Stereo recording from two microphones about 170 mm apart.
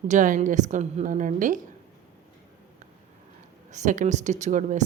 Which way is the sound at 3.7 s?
45° right (ahead or behind).